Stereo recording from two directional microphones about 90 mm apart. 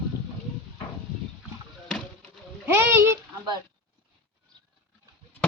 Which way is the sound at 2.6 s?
25° right (ahead or behind).